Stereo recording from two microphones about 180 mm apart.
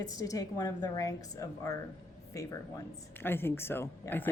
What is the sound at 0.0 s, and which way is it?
A woman's voice, 20° left (ahead or behind).